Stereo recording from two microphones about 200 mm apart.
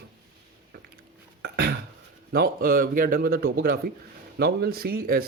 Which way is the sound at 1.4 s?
55° right (ahead or behind).